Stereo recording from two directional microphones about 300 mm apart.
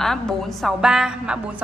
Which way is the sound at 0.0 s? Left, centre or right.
Centre.